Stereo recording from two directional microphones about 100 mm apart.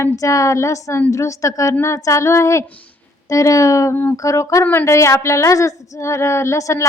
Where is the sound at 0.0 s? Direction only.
35° left (ahead or behind).